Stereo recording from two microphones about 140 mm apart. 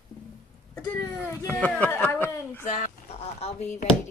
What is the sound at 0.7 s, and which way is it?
Speech, 25° left (ahead or behind).